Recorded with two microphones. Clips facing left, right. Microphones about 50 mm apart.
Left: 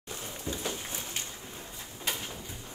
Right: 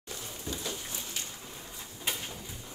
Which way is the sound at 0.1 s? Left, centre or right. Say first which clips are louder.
Left 2 dB; left.